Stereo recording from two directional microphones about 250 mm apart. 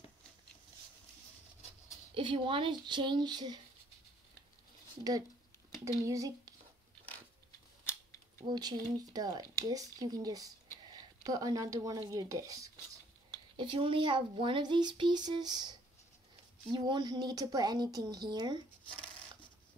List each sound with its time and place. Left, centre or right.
2.1 s speech: centre
5.9 s speech: centre
8.5 s speech: centre
16.7 s speech: centre